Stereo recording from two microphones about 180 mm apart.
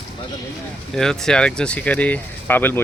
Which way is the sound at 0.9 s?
5° left (ahead or behind).